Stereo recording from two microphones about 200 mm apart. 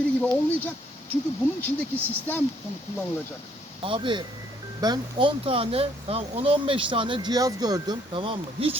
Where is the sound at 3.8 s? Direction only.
25° right (ahead or behind).